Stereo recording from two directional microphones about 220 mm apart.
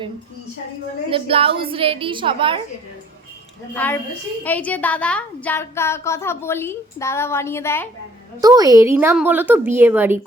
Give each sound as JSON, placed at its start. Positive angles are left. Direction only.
{"t": 1.1, "sound": "a woman's voice", "side_deg": -25}
{"t": 3.8, "sound": "speech", "side_deg": 10}
{"t": 8.4, "sound": "a woman's voice", "side_deg": -15}